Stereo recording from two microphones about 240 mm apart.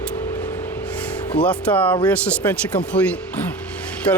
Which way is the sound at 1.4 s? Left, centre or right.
Centre.